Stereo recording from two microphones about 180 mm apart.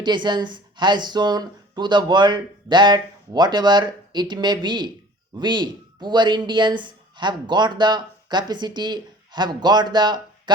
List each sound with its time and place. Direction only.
0.0 s speech: 25° right (ahead or behind)